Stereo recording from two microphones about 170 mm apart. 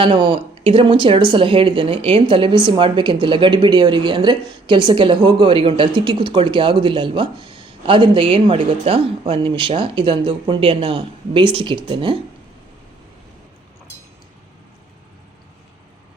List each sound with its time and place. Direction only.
0.0 s speech: 25° right (ahead or behind)